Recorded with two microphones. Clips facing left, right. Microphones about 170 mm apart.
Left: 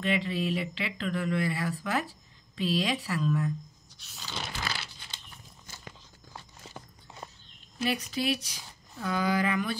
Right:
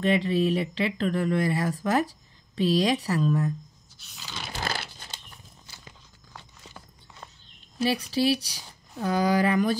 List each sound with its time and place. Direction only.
0.0 s speech: 40° right (ahead or behind)
4.0 s a sound: 5° right (ahead or behind)
4.6 s crumpling: 45° right (ahead or behind)
7.8 s speech: 30° right (ahead or behind)